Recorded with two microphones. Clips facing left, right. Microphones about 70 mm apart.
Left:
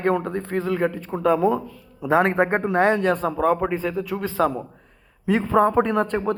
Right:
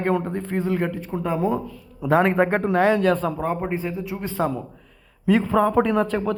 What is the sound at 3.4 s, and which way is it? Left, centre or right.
Speech, left.